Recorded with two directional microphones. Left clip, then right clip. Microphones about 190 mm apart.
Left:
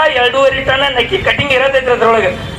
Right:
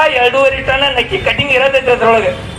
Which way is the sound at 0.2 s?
10° right (ahead or behind).